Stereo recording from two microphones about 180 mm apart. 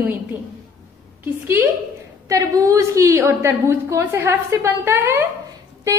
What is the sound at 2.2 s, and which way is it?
A woman's voice, 20° right (ahead or behind).